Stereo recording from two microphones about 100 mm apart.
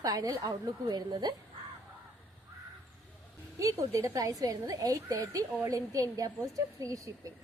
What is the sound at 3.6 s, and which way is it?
A woman's voice, 30° right (ahead or behind).